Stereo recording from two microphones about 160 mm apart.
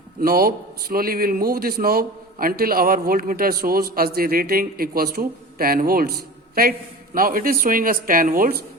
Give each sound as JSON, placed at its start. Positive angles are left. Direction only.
{"t": 0.2, "sound": "a man's voice", "side_deg": -70}